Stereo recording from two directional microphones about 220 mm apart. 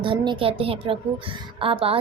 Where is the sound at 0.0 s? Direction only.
25° right (ahead or behind).